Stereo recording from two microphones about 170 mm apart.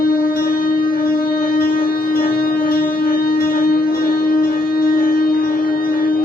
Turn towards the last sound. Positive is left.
turn(degrees=60)  # may be behind; listen again after turning